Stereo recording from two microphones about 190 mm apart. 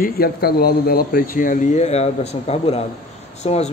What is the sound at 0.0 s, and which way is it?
Speech, 55° left (ahead or behind).